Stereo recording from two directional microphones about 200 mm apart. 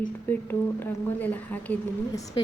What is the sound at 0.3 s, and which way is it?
A woman's voice, 10° left (ahead or behind).